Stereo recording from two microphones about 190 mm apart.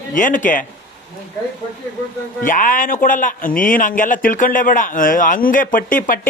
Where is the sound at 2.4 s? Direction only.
45° left (ahead or behind).